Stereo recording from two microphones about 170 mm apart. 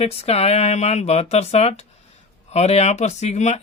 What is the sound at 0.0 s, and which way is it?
Speech, 35° left (ahead or behind).